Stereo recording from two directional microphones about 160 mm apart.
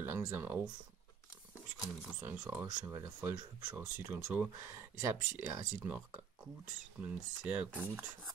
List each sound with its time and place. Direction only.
0.3 s speech: 15° right (ahead or behind)
1.8 s speech: 5° right (ahead or behind)
2.6 s speech: 20° right (ahead or behind)